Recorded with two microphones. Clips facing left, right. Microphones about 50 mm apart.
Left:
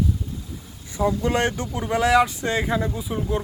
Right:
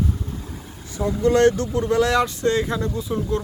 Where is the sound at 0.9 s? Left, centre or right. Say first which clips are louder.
Right 3 dB; centre.